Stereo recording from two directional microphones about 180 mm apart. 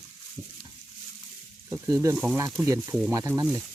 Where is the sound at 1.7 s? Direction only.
15° right (ahead or behind).